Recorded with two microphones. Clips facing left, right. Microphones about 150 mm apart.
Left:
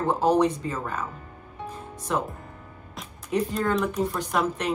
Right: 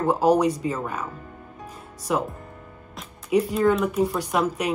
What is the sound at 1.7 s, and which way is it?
Music, 10° right (ahead or behind).